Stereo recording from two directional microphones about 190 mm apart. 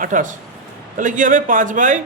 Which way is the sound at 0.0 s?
45° right (ahead or behind).